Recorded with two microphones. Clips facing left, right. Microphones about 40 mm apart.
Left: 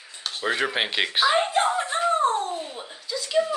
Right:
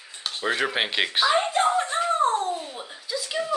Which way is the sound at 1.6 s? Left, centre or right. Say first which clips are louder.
Even; centre.